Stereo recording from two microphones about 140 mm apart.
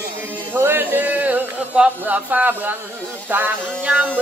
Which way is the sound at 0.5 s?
15° right (ahead or behind).